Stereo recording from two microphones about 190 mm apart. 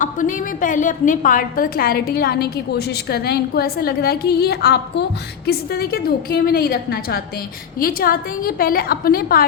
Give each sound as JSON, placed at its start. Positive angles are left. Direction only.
{"t": 0.0, "sound": "a woman's voice", "side_deg": 40}